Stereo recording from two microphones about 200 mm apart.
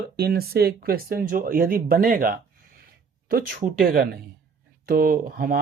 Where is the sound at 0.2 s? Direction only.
50° right (ahead or behind).